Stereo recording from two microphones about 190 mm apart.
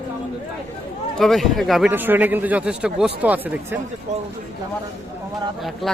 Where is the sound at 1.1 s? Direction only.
Centre (ahead or behind).